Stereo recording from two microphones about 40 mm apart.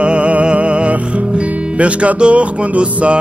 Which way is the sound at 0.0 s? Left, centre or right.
Right.